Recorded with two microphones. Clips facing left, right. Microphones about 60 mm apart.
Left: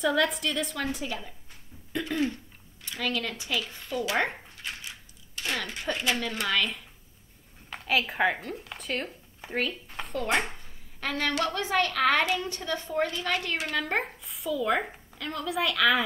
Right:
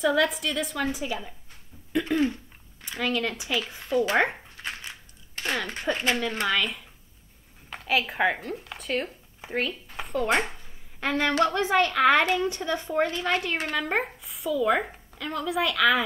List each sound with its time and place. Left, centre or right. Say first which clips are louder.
0.0 s a woman's voice: right 2 dB; centre
2.0 s a woman's voice: right 3 dB; right
3.0 s speech: right 4 dB; centre
3.5 s a woman's voice: even; right
4.6 s a sound: right 3 dB; right
5.9 s a woman's voice: right 4 dB; centre
6.4 s a woman's voice: right 2 dB; centre
9.4 s a sound: right 1 dB; centre
10.1 s speech: right 3 dB; centre
11.0 s a woman's voice: right 5 dB; right
13.2 s a woman's voice: right 3 dB; right
13.7 s a woman's voice: right 2 dB; centre